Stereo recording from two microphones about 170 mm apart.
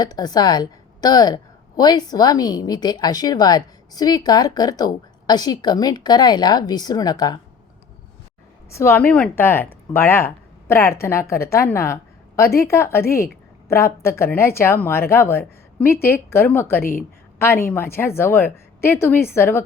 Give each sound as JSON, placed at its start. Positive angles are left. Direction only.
{"t": 0.0, "sound": "a woman's voice", "side_deg": 25}
{"t": 8.7, "sound": "speech", "side_deg": 15}